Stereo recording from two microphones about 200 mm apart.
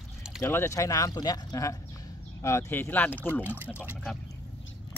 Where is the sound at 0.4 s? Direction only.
10° left (ahead or behind).